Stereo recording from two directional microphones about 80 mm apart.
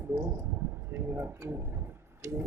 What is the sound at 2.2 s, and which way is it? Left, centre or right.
Tick-tock, right.